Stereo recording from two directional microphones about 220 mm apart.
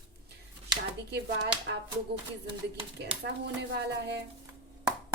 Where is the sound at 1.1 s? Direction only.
50° right (ahead or behind).